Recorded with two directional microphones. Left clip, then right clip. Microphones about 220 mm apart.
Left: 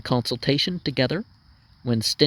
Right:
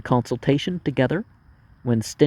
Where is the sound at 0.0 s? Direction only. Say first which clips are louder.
Right 2 dB; 35° left (ahead or behind).